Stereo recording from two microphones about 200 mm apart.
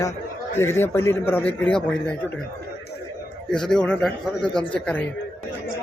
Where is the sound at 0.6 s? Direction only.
10° left (ahead or behind).